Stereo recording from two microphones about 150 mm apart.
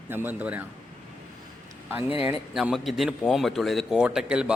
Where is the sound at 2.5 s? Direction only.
Centre (ahead or behind).